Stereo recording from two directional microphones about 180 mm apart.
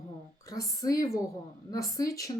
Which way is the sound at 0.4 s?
20° left (ahead or behind).